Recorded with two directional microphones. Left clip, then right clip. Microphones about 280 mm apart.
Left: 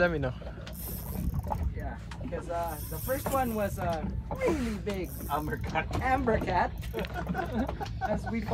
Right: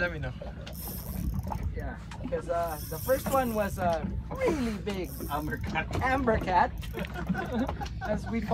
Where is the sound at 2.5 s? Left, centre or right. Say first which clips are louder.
Right 2 dB; centre.